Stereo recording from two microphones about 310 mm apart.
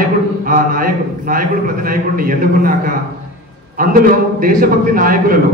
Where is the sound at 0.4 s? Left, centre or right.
Right.